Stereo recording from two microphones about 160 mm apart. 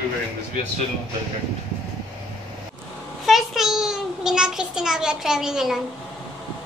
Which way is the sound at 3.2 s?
Centre (ahead or behind).